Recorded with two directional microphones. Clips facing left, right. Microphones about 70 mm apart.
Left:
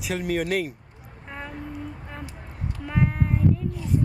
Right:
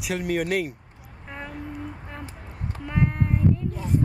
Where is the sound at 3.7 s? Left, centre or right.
Right.